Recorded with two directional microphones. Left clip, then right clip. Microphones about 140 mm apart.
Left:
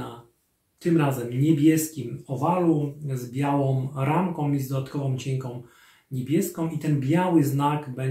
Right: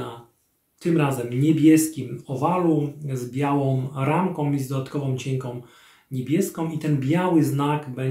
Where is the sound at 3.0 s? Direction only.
15° right (ahead or behind).